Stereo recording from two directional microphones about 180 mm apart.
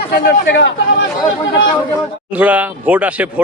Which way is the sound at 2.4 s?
10° right (ahead or behind).